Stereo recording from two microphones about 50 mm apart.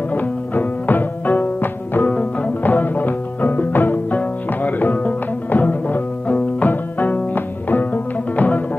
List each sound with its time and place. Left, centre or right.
0.1 s music: left
2.0 s music: left
2.6 s music: left